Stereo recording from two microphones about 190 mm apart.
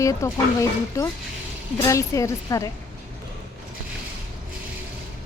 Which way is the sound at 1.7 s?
15° left (ahead or behind).